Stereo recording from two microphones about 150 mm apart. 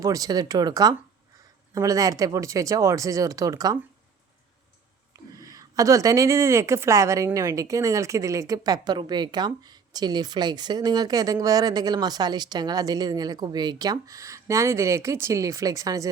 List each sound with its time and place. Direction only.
0.0 s speech: 20° right (ahead or behind)
5.4 s speech: 25° right (ahead or behind)